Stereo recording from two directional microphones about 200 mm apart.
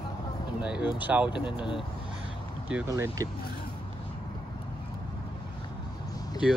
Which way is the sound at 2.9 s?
15° right (ahead or behind).